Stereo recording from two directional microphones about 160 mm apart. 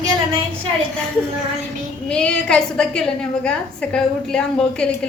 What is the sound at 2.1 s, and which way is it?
A woman's voice, 5° left (ahead or behind).